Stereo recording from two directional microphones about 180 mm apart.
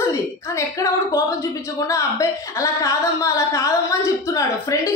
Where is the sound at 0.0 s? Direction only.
15° left (ahead or behind).